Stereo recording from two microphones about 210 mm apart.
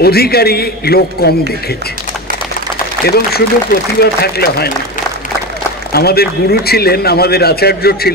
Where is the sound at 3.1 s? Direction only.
50° left (ahead or behind).